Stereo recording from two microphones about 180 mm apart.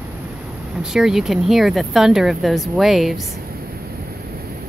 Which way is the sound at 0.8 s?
5° right (ahead or behind).